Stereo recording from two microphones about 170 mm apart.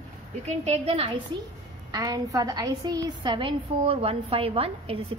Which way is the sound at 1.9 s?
20° right (ahead or behind).